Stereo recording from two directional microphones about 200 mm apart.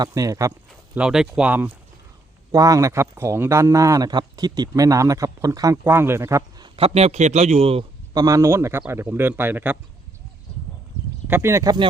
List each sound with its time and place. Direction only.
0.0 s speech: 15° right (ahead or behind)
0.9 s speech: 5° right (ahead or behind)
6.7 s a man's voice: 30° right (ahead or behind); by 9.7 s 10° right (ahead or behind)
11.3 s speech: 10° right (ahead or behind)